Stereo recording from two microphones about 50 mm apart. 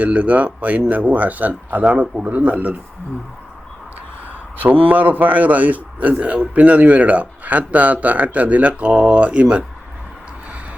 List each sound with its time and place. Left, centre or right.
0.0 s a man's voice: right
4.6 s a man's voice: right